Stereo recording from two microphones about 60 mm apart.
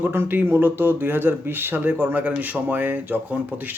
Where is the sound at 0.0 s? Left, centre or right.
Right.